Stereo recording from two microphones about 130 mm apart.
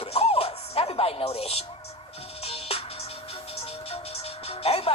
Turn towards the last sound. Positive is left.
turn(degrees=50)  # may be behind; listen again after turning